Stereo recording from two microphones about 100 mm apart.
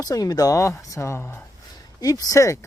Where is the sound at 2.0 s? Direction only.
40° left (ahead or behind).